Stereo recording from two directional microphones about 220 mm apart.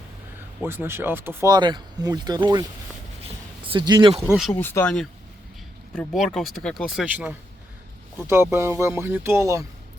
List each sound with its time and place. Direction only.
0.6 s speech: 10° right (ahead or behind)
3.2 s a sound: 25° right (ahead or behind)
4.3 s speech: centre (ahead or behind)